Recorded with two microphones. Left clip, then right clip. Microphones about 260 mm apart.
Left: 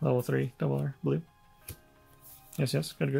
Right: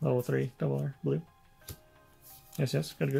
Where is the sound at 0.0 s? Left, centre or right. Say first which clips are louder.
Left 1 dB; centre.